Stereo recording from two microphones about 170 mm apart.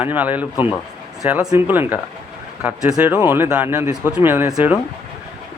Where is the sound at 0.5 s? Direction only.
25° left (ahead or behind).